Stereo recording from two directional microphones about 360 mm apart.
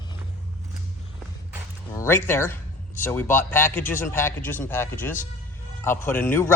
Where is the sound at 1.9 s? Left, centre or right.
Centre.